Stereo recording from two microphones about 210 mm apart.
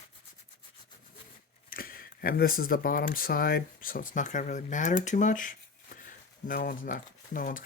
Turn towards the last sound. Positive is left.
turn(degrees=40)  # may be behind; listen again after turning